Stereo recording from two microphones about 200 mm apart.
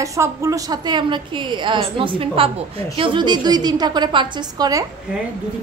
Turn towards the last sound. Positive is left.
turn(degrees=-20)  # may be behind; listen again after turning